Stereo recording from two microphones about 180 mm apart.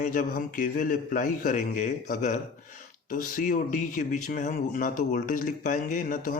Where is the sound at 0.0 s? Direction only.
50° left (ahead or behind).